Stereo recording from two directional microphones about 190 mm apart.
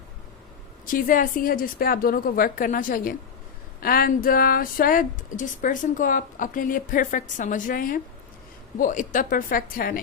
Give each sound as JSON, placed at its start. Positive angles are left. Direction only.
{"t": 0.9, "sound": "speech", "side_deg": 45}